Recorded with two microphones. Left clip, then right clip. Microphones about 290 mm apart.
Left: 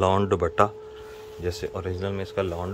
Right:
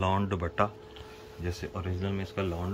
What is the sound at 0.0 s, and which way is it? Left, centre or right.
Speech, left.